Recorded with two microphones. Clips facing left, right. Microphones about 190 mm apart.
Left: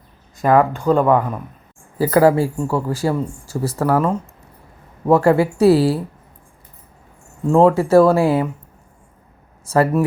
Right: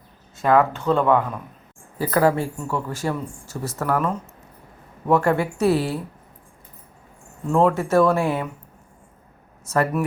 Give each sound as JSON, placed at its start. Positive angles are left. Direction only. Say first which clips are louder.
{"t": 0.9, "sound": "speech", "louder": "left 2 dB", "side_deg": 45}
{"t": 7.5, "sound": "speech", "louder": "left 6 dB", "side_deg": 35}
{"t": 9.6, "sound": "speech", "louder": "left 5 dB", "side_deg": 30}